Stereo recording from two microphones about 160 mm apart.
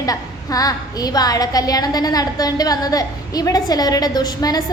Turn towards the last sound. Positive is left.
turn(degrees=25)  # may be behind; listen again after turning